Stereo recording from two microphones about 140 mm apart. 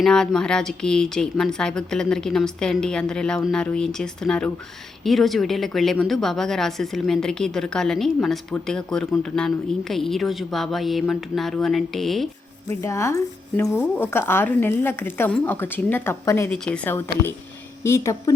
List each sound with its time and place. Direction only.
0.0 s speech: 5° left (ahead or behind)
12.6 s speech: 20° left (ahead or behind)